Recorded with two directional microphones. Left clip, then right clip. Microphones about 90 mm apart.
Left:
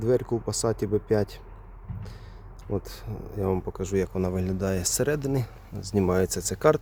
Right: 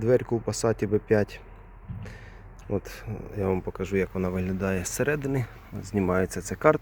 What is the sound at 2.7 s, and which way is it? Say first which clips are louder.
Speech: right 1 dB; 30° left (ahead or behind).